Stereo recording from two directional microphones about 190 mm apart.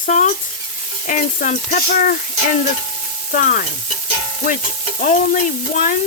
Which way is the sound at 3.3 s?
45° left (ahead or behind).